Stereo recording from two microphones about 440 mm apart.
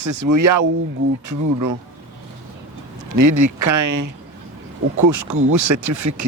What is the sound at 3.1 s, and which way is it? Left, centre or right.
Speech, right.